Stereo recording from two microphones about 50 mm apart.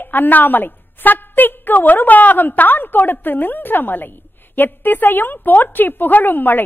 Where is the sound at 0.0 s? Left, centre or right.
Left.